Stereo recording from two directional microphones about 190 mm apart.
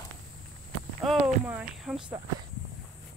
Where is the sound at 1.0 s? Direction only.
5° right (ahead or behind).